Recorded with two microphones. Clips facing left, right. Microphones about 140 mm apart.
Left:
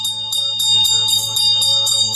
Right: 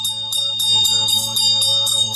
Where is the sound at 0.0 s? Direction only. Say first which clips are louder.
Left 1 dB; centre (ahead or behind).